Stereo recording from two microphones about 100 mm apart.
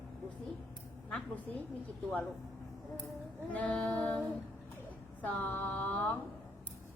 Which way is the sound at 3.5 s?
10° left (ahead or behind).